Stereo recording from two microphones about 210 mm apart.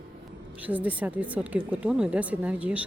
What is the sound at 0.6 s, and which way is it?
Speech, 5° right (ahead or behind).